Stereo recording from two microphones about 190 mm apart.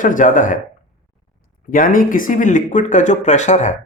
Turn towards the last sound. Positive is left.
turn(degrees=40)  # may be behind; listen again after turning